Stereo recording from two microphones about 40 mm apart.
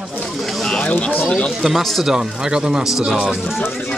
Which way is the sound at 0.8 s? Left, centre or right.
Left.